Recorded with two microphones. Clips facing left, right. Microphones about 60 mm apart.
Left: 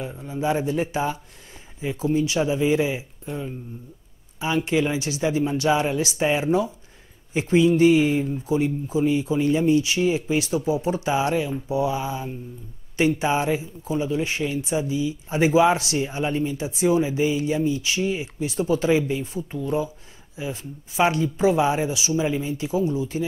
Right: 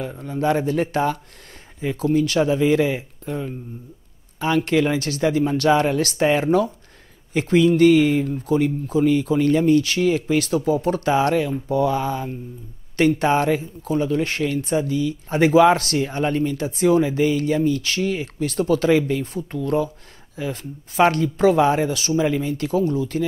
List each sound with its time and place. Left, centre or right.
0.2 s speech: right